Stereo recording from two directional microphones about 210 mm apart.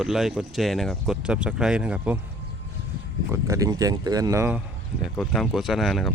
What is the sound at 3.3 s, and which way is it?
Speech, 15° right (ahead or behind).